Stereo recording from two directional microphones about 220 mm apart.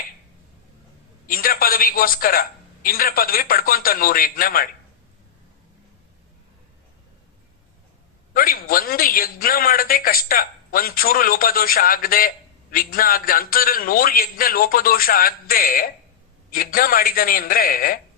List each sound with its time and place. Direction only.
1.3 s a woman's voice: 40° left (ahead or behind)
8.3 s a woman's voice: 40° left (ahead or behind)